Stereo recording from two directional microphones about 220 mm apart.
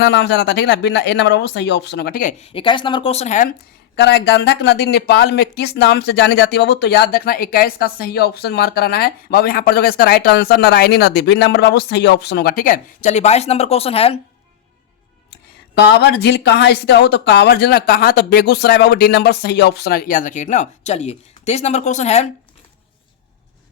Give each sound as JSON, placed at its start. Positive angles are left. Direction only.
{"t": 0.0, "sound": "speech", "side_deg": 50}
{"t": 3.9, "sound": "speech", "side_deg": 50}
{"t": 15.8, "sound": "speech", "side_deg": 50}